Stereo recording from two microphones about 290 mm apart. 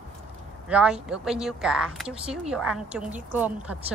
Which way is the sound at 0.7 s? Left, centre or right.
Centre.